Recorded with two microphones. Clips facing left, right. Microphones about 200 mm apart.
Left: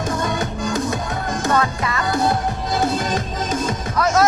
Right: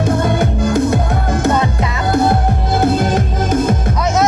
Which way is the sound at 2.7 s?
55° right (ahead or behind).